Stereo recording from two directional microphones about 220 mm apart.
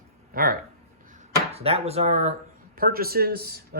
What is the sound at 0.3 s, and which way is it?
Speech, 40° right (ahead or behind).